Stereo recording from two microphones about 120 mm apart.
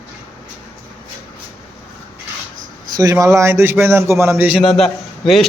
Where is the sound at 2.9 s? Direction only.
30° right (ahead or behind).